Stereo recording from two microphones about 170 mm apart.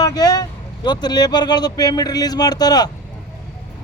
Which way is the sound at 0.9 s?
25° left (ahead or behind).